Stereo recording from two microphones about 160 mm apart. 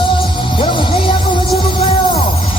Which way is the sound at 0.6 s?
35° left (ahead or behind).